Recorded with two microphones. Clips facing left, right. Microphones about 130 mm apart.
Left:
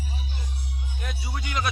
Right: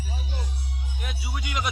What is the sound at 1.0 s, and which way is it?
Music, 10° right (ahead or behind).